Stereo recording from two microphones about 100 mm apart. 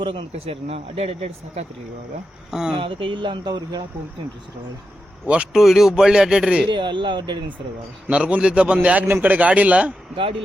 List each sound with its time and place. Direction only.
0.0 s speech: 60° right (ahead or behind); by 1.6 s 90° right
2.5 s a man's voice: 5° right (ahead or behind)
2.7 s speech: 60° right (ahead or behind)
5.2 s speech: 10° right (ahead or behind)
6.7 s speech: 55° right (ahead or behind)
8.0 s a man's voice: 10° right (ahead or behind)